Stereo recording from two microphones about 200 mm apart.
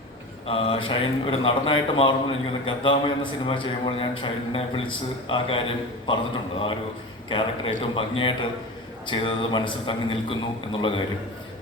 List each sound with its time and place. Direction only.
0.4 s a man's voice: 30° left (ahead or behind)
7.3 s a man's voice: 25° left (ahead or behind)